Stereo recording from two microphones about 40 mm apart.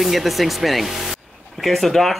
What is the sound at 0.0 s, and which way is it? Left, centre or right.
Speech, centre.